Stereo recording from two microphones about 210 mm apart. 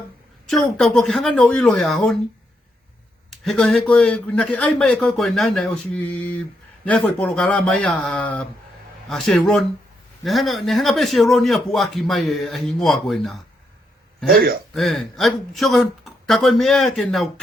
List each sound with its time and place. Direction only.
0.4 s a man's voice: centre (ahead or behind)
3.2 s a man's voice: centre (ahead or behind)
14.3 s speech: 45° right (ahead or behind)
14.7 s a man's voice: centre (ahead or behind)